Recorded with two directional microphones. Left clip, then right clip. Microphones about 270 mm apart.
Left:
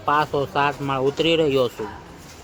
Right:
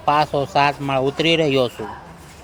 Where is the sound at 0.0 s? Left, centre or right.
Centre.